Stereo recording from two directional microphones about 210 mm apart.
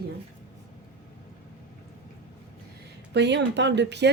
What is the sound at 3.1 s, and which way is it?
Speech, 55° right (ahead or behind).